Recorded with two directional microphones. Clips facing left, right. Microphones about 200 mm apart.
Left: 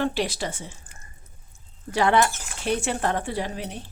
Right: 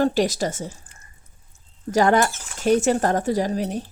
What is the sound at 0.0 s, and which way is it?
Speech, 40° right (ahead or behind).